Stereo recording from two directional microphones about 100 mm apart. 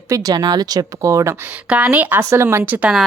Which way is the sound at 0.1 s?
35° right (ahead or behind).